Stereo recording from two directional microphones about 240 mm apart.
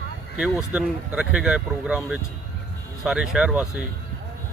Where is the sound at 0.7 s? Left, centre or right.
Centre.